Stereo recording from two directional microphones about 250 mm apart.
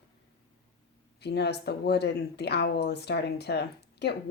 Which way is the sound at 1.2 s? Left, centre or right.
Left.